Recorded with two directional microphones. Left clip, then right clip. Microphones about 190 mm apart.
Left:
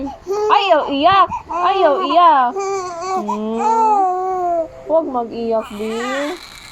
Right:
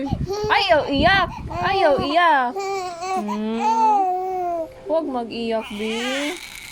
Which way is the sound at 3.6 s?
20° right (ahead or behind).